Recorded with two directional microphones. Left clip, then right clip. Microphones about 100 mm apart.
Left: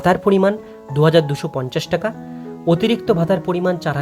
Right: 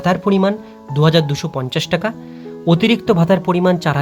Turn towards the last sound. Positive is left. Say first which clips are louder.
# right 4 dB
turn(degrees=-5)  # may be behind; listen again after turning